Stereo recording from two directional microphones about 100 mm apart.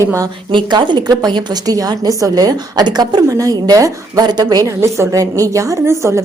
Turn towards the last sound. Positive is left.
turn(degrees=-30)  # may be behind; listen again after turning